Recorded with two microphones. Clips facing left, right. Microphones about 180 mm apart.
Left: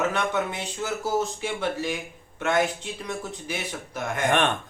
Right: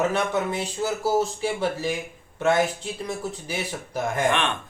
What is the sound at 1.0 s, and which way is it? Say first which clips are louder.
Speech: right 4 dB; 35° right (ahead or behind).